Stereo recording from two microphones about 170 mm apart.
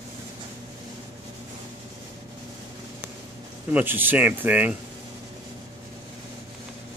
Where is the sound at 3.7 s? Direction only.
10° right (ahead or behind).